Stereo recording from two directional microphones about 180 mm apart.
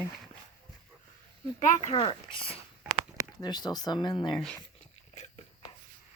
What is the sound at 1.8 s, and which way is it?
Speech, 30° left (ahead or behind).